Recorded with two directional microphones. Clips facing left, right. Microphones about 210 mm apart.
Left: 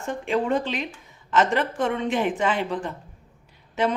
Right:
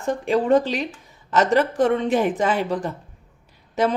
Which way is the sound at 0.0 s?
35° right (ahead or behind).